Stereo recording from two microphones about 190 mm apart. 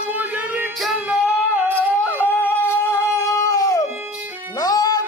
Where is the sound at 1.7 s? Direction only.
10° left (ahead or behind).